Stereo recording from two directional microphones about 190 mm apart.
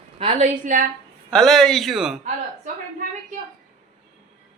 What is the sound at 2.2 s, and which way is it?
Speech, 40° right (ahead or behind).